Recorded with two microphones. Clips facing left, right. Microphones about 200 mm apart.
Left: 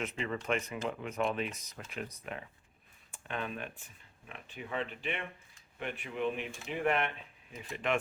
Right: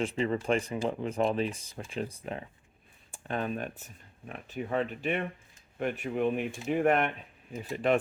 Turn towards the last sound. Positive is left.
turn(degrees=-35)  # may be behind; listen again after turning